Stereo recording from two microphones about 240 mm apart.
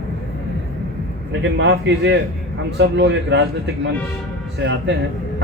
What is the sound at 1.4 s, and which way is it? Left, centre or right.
A man's voice, right.